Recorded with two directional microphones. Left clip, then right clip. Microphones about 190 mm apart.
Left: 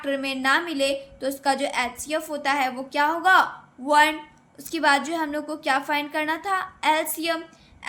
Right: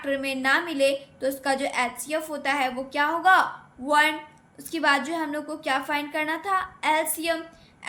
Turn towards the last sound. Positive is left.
turn(degrees=15)  # may be behind; listen again after turning